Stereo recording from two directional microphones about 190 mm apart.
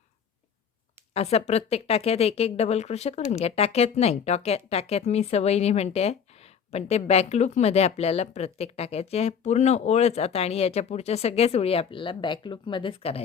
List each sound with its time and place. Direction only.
1.1 s speech: 35° left (ahead or behind)